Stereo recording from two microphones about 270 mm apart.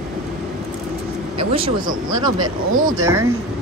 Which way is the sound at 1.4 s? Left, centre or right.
Centre.